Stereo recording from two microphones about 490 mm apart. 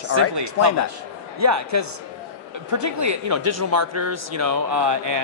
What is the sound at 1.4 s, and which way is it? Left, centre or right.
Speech, right.